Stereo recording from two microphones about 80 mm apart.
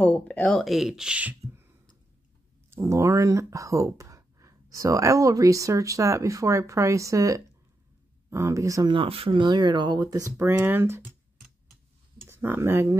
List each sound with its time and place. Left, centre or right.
0.0 s speech: centre
0.7 s speech: centre
2.7 s speech: right
8.8 s speech: right
10.4 s speech: right
12.3 s speech: right